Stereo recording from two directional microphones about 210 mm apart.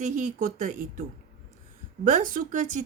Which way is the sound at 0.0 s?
35° right (ahead or behind).